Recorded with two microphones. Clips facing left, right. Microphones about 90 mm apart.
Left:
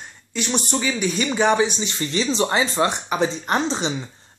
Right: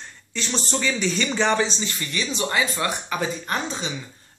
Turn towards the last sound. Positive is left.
turn(degrees=30)  # may be behind; listen again after turning